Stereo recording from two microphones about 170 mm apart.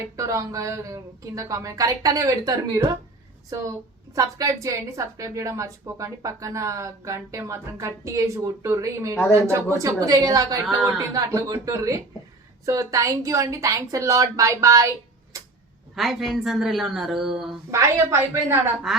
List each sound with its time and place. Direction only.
0.0 s a woman's voice: 20° right (ahead or behind)
15.3 s tick-tock: 20° right (ahead or behind)
16.0 s speech: centre (ahead or behind)
17.7 s a woman's voice: 15° right (ahead or behind)
18.9 s speech: centre (ahead or behind)